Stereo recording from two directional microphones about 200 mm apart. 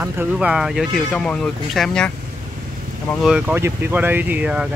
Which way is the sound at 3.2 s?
5° right (ahead or behind).